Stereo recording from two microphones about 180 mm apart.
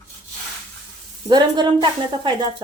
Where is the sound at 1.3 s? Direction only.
25° right (ahead or behind).